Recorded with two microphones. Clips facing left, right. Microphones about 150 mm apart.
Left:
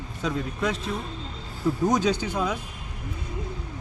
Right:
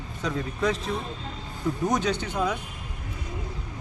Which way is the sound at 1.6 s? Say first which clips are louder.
Left 3 dB; 25° left (ahead or behind).